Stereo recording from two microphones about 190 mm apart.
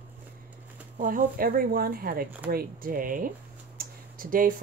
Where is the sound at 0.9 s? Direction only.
45° right (ahead or behind).